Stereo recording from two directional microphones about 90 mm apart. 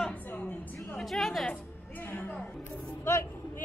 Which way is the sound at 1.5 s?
20° left (ahead or behind).